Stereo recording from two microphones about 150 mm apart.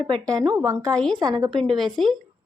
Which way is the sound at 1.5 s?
Centre (ahead or behind).